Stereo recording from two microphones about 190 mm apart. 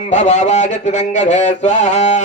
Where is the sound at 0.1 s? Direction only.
40° left (ahead or behind).